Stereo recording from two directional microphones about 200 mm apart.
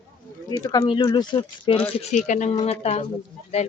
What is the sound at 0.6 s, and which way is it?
Speech, 20° left (ahead or behind).